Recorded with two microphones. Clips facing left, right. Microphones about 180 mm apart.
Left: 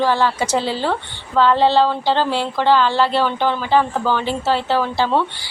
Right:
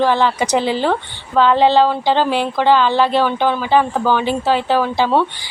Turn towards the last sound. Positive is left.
turn(degrees=-15)  # may be behind; listen again after turning